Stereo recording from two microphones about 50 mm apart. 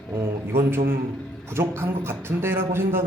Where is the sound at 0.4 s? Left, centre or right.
Right.